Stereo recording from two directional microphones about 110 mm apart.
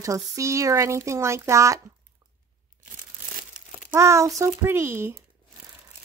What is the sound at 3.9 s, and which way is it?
A woman's voice, 25° right (ahead or behind).